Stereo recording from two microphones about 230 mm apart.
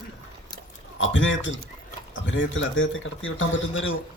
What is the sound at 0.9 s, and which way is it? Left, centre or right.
A man's voice, left.